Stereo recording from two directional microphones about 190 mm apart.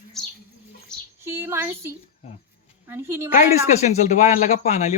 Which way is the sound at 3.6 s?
40° left (ahead or behind).